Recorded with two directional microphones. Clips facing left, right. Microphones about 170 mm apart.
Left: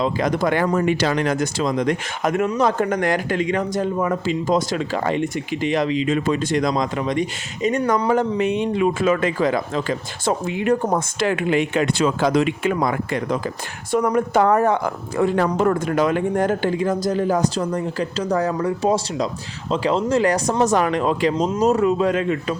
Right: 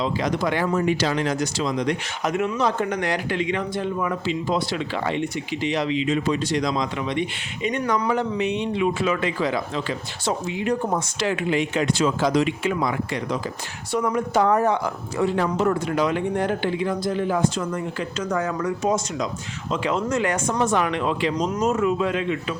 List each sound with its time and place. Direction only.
0.0 s speech: 50° left (ahead or behind)